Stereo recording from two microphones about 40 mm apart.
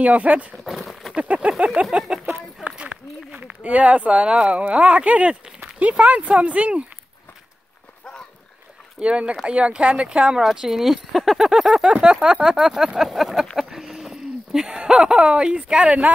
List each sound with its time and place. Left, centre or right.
0.0 s speech: right
0.7 s horse: centre
1.1 s speech: right
1.9 s speech: centre
2.8 s a sound: right
3.4 s speech: right
9.0 s speech: right
10.4 s speech: centre
13.1 s a sound: centre
14.9 s speech: centre